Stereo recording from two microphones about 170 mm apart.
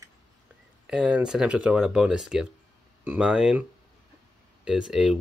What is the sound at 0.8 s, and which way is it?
Speech, 5° right (ahead or behind).